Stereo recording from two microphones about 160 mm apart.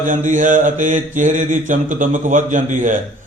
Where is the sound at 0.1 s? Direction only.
50° right (ahead or behind).